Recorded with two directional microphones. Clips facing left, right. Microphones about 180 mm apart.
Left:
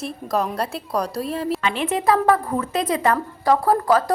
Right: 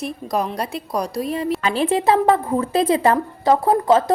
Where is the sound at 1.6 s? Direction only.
35° right (ahead or behind).